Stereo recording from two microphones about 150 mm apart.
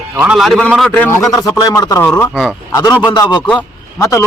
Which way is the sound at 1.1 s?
20° left (ahead or behind).